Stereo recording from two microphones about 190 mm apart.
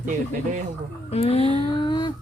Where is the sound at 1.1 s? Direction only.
30° left (ahead or behind).